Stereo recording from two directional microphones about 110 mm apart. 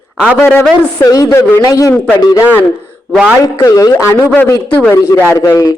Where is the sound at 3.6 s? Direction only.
35° left (ahead or behind).